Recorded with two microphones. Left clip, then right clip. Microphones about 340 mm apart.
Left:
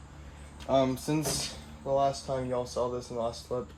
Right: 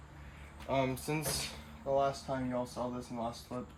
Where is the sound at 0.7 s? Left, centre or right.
Centre.